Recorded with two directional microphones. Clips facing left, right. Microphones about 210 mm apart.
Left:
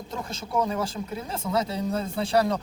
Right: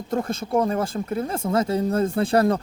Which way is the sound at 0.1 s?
50° right (ahead or behind).